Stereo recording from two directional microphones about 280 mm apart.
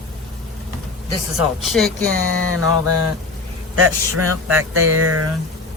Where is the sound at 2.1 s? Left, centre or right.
Left.